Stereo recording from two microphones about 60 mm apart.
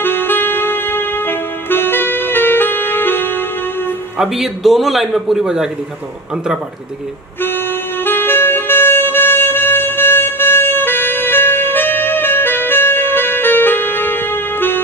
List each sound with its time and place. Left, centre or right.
0.0 s music: left
4.2 s a man's voice: centre
7.4 s music: left